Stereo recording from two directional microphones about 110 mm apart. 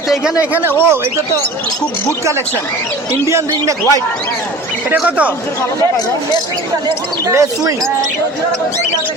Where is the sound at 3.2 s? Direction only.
30° right (ahead or behind).